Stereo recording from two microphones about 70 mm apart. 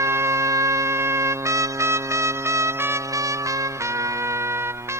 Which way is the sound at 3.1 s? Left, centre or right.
Right.